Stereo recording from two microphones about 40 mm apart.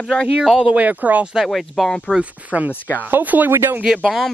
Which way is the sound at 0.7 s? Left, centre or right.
Right.